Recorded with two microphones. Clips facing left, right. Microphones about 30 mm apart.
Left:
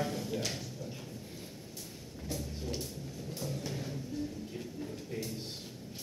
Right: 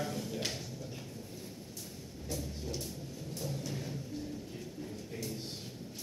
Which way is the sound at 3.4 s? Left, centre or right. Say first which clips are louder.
Even; centre.